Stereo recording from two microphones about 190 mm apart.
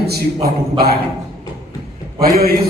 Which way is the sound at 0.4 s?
55° right (ahead or behind).